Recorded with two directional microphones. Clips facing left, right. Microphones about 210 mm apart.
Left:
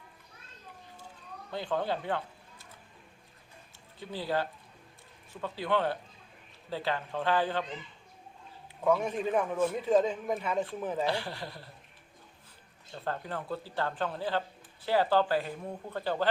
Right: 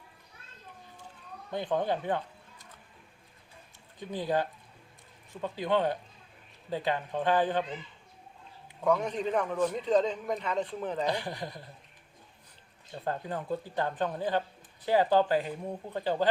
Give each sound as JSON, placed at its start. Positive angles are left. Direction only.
{"t": 1.5, "sound": "speech", "side_deg": -20}
{"t": 4.0, "sound": "speech", "side_deg": -20}
{"t": 8.8, "sound": "a man's voice", "side_deg": 5}
{"t": 11.0, "sound": "speech", "side_deg": -15}
{"t": 12.9, "sound": "speech", "side_deg": -15}